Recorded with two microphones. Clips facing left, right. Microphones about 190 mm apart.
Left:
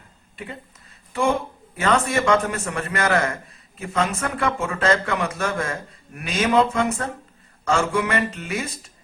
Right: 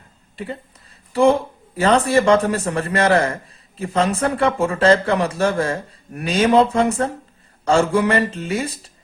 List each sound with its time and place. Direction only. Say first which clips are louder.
1.1 s a man's voice: right 7 dB; 35° right (ahead or behind)